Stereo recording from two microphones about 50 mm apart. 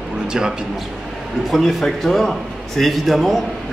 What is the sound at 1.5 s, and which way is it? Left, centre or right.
A man's voice, centre.